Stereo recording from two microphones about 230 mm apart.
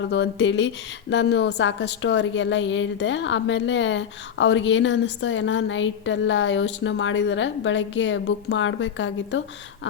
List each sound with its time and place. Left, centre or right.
0.1 s a woman's voice: left